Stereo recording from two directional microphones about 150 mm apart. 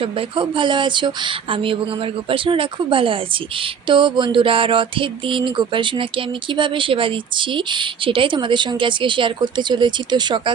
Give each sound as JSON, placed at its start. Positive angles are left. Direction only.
{"t": 0.0, "sound": "speech", "side_deg": -35}